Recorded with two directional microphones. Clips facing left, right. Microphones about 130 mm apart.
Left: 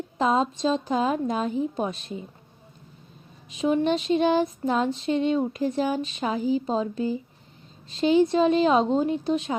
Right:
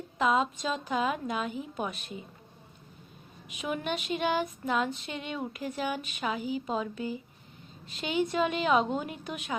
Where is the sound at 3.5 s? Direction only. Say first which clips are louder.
Left 10 dB; 30° left (ahead or behind).